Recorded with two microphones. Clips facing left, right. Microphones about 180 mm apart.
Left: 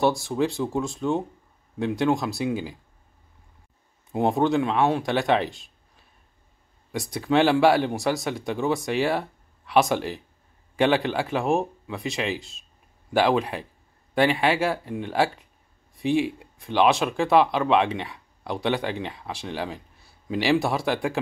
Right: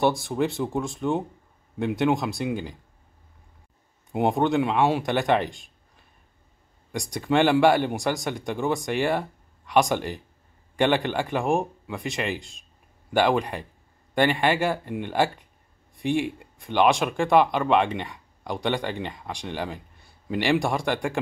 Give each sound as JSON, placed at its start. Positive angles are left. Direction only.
{"t": 0.0, "sound": "speech", "side_deg": 0}
{"t": 4.1, "sound": "speech", "side_deg": 0}
{"t": 6.9, "sound": "speech", "side_deg": 0}